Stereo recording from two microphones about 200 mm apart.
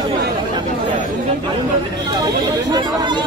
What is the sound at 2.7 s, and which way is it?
Speech, 20° right (ahead or behind).